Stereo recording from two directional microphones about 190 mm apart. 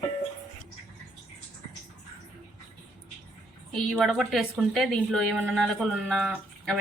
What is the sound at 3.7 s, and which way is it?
A woman's voice, centre (ahead or behind).